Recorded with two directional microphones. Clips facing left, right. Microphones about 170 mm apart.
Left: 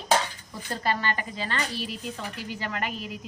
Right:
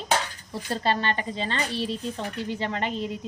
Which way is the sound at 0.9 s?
25° right (ahead or behind).